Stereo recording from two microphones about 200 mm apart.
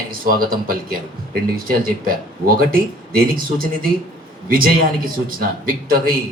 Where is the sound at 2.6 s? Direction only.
45° right (ahead or behind).